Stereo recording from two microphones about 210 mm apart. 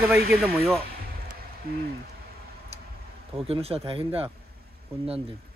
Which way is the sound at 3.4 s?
30° right (ahead or behind).